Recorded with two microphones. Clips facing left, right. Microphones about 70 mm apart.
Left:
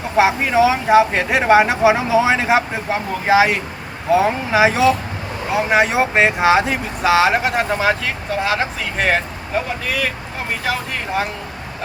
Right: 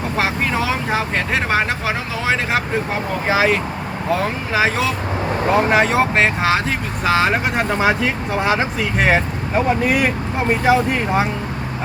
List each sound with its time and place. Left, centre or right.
0.2 s speech: centre
9.8 s speech: centre